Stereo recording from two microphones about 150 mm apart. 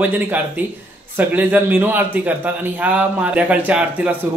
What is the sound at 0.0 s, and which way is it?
A man's voice, 10° right (ahead or behind).